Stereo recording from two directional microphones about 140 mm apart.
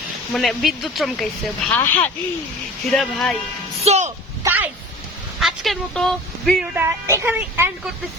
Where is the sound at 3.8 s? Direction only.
55° right (ahead or behind).